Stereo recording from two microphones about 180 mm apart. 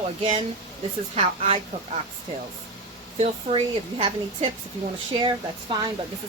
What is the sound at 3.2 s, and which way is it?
Speech, 30° right (ahead or behind).